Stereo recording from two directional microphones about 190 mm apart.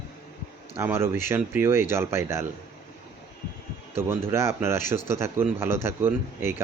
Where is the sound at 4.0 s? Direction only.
15° right (ahead or behind).